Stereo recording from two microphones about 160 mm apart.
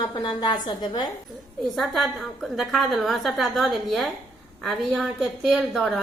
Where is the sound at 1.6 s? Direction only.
Centre (ahead or behind).